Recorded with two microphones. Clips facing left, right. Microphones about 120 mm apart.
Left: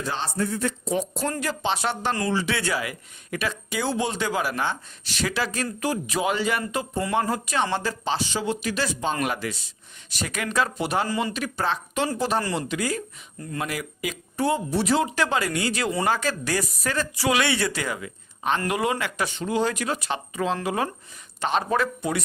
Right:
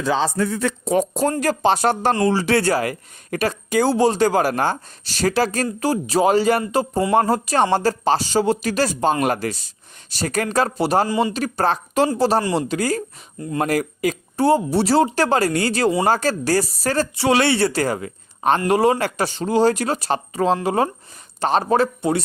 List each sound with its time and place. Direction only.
0.3 s speech: 90° right; by 22.2 s 30° right (ahead or behind)